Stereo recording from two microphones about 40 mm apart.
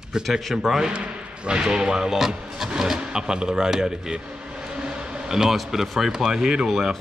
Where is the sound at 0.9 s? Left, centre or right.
Right.